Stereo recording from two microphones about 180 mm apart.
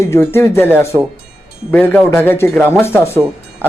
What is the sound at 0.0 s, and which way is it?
Speech, 15° left (ahead or behind).